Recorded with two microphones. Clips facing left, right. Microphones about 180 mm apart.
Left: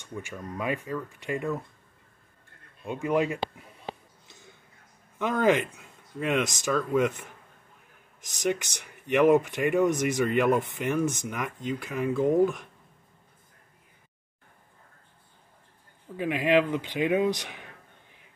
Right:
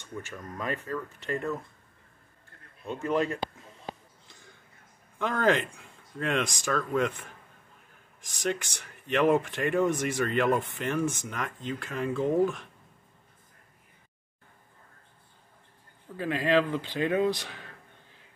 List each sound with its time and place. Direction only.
0.0 s speech: 15° left (ahead or behind)
2.8 s speech: 15° left (ahead or behind)
5.2 s speech: 15° left (ahead or behind)
8.4 s speech: 15° left (ahead or behind)
16.2 s speech: 15° left (ahead or behind)